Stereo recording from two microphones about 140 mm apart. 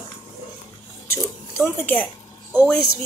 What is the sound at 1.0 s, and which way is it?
Speech, 15° left (ahead or behind).